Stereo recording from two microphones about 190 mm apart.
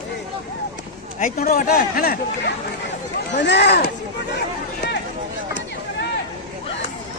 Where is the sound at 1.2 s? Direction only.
45° left (ahead or behind).